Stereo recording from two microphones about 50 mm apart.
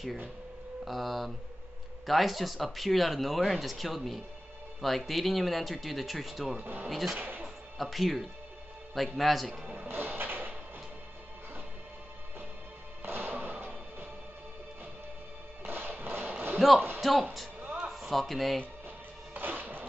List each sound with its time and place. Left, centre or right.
0.8 s speech: centre
6.6 s speech: right
6.9 s speech: centre
7.2 s music: right
7.4 s music: centre
8.9 s speech: centre
9.8 s music: right
13.0 s music: right
15.6 s music: right
16.5 s speech: centre
19.3 s music: right